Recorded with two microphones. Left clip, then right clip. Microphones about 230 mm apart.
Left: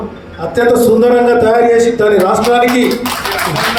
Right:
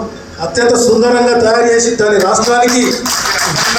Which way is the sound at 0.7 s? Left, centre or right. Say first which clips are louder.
Left 2 dB; left.